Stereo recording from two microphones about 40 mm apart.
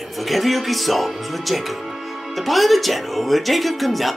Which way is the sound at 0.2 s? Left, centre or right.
Centre.